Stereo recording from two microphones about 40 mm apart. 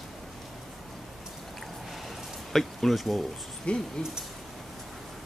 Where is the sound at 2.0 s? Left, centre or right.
Centre.